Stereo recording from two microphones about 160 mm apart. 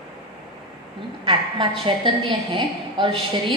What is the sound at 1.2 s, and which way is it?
A woman's voice, 30° right (ahead or behind).